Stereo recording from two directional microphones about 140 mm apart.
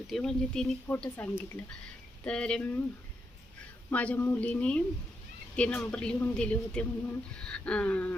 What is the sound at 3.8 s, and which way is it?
A woman's voice, 10° left (ahead or behind).